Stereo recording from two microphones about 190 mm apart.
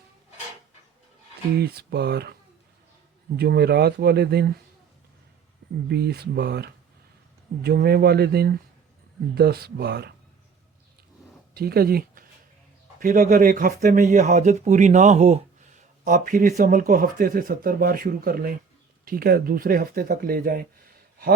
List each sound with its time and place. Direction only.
1.5 s speech: 55° right (ahead or behind)
5.9 s speech: 60° right (ahead or behind)
11.5 s speech: 55° right (ahead or behind)